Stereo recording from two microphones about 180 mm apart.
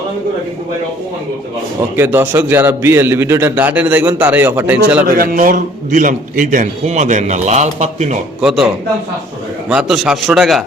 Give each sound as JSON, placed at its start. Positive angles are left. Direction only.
{"t": 2.0, "sound": "a man's voice", "side_deg": -10}
{"t": 5.1, "sound": "a man's voice", "side_deg": -55}
{"t": 8.4, "sound": "a man's voice", "side_deg": -5}